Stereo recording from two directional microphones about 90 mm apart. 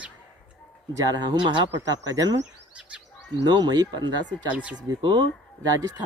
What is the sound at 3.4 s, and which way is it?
Speech, 50° right (ahead or behind).